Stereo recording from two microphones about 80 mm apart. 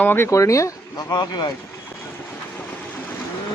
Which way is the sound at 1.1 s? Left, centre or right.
Left.